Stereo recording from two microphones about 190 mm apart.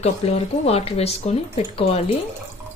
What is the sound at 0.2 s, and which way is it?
Speech, 30° left (ahead or behind).